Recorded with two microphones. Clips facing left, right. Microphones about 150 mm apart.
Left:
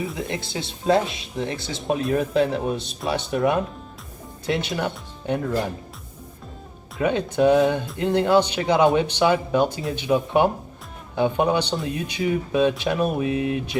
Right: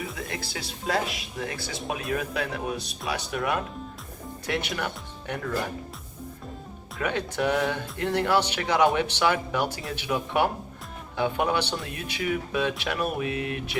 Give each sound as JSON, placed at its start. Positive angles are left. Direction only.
{"t": 0.0, "sound": "speech", "side_deg": 25}
{"t": 7.0, "sound": "speech", "side_deg": 20}